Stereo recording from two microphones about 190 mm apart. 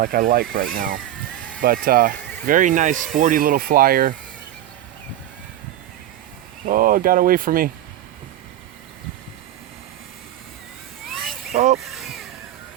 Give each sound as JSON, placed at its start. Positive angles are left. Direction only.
{"t": 0.0, "sound": "speech", "side_deg": -50}
{"t": 6.7, "sound": "speech", "side_deg": -50}
{"t": 11.1, "sound": "a sound", "side_deg": 0}
{"t": 11.5, "sound": "speech", "side_deg": -40}
{"t": 11.8, "sound": "vehicle", "side_deg": 0}